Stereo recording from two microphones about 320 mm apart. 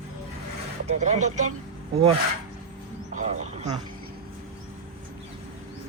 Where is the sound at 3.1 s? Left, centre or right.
Right.